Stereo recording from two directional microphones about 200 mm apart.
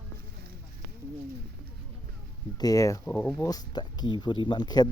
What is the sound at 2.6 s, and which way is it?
Speech, 15° left (ahead or behind).